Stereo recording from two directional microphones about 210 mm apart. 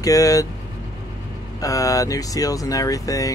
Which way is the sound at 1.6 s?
15° left (ahead or behind).